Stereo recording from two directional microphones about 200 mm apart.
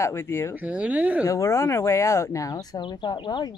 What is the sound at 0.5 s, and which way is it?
Speech, 5° right (ahead or behind).